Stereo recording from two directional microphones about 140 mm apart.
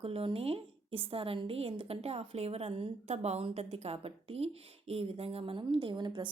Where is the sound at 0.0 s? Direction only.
45° right (ahead or behind).